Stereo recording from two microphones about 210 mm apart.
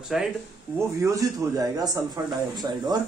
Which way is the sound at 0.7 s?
15° right (ahead or behind).